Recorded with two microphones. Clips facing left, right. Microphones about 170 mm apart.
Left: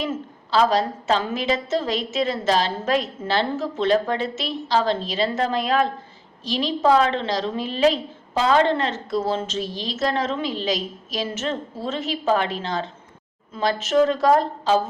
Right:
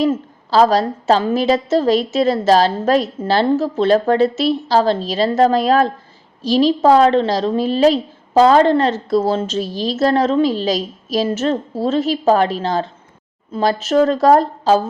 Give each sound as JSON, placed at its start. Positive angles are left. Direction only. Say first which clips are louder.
{"t": 0.5, "sound": "a woman's voice", "louder": "right 6 dB", "side_deg": -40}